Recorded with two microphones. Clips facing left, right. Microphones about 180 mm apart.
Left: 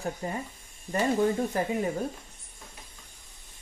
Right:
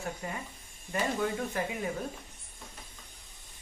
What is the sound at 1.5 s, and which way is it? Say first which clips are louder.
Speech: left 4 dB; 40° left (ahead or behind).